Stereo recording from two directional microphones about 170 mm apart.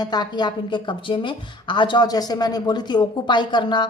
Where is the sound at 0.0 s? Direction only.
25° left (ahead or behind).